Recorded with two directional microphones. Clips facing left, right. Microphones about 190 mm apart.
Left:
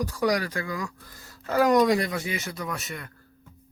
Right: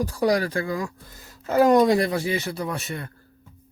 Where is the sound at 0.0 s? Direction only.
30° right (ahead or behind).